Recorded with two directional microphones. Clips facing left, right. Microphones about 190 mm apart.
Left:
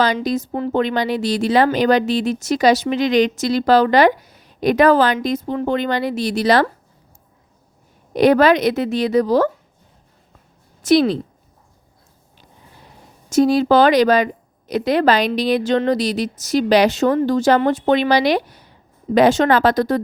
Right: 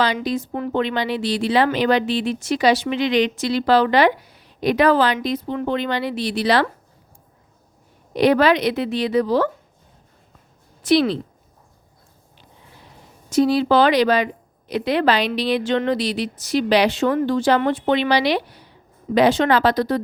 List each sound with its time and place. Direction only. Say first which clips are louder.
0.0 s speech: left 3 dB; 45° left (ahead or behind)
8.1 s speech: left 3 dB; 45° left (ahead or behind)
10.8 s speech: left 3 dB; 45° left (ahead or behind)
13.3 s speech: left 3 dB; 45° left (ahead or behind)